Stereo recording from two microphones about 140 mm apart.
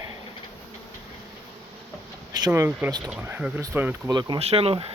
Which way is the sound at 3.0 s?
5° right (ahead or behind).